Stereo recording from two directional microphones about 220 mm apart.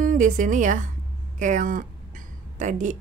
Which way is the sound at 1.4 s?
35° right (ahead or behind).